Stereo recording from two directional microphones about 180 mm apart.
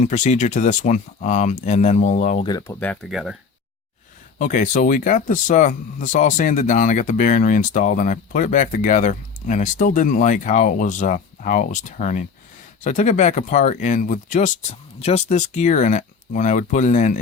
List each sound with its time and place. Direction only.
0.0 s speech: 40° left (ahead or behind)
2.5 s speech: 20° left (ahead or behind)
2.8 s speech: 5° left (ahead or behind)
4.4 s speech: 45° left (ahead or behind)